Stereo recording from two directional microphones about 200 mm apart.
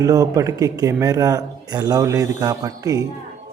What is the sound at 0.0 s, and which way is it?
A man's voice, 15° right (ahead or behind).